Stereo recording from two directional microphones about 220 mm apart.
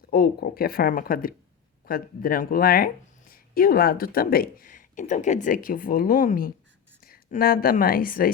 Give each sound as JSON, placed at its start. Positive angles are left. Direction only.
{"t": 0.1, "sound": "a woman's voice", "side_deg": 45}